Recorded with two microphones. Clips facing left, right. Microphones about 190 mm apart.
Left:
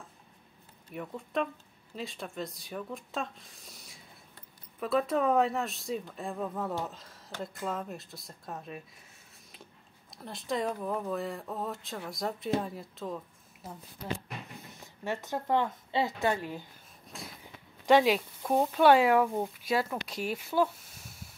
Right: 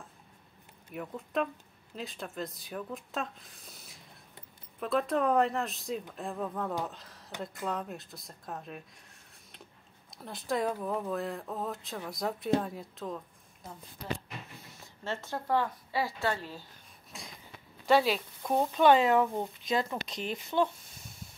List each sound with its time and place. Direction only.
0.9 s speech: centre (ahead or behind)
10.1 s speech: centre (ahead or behind)
14.7 s a woman's voice: 15° left (ahead or behind)
17.1 s speech: centre (ahead or behind)
17.8 s speech: 15° left (ahead or behind)